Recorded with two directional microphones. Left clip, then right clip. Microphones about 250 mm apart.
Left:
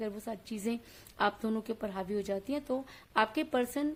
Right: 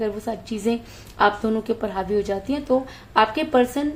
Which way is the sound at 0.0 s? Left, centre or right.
Left.